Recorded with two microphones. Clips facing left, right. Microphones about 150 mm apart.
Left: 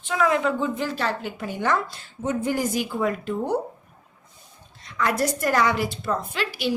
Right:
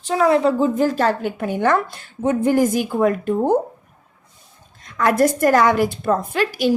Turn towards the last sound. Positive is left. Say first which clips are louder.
# right 8 dB
turn(degrees=-45)  # may be behind; listen again after turning